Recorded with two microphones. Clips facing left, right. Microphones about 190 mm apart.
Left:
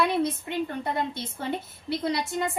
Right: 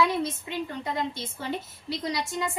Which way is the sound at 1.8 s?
60° left (ahead or behind).